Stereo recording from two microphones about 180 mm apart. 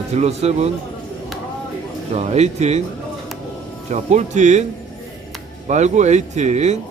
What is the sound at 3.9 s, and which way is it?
Speech, 40° right (ahead or behind).